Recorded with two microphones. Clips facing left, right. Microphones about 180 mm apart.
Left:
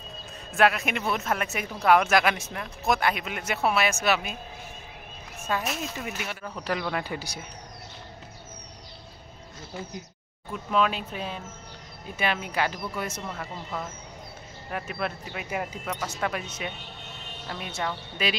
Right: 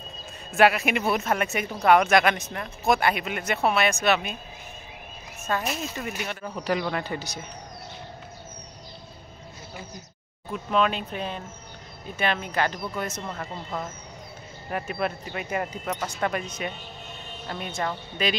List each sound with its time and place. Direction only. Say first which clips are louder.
0.6 s speech: right 3 dB; 5° right (ahead or behind)
5.5 s speech: right 1 dB; 5° left (ahead or behind)
10.5 s speech: right 1 dB; centre (ahead or behind)
17.7 s speech: right 2 dB; 5° left (ahead or behind)